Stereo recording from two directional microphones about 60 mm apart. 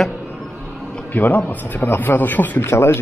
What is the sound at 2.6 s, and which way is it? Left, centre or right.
Speech, left.